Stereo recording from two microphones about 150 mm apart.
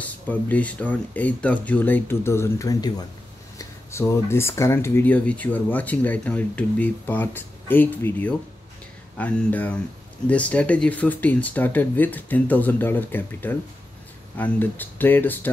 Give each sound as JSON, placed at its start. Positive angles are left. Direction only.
{"t": 0.0, "sound": "speech", "side_deg": 10}